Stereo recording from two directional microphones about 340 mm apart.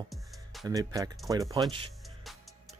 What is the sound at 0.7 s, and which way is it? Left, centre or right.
Speech, centre.